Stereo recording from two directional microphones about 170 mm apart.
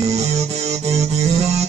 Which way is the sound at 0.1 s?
40° right (ahead or behind).